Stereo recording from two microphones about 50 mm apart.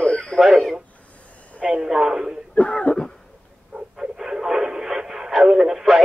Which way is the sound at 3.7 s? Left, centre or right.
Centre.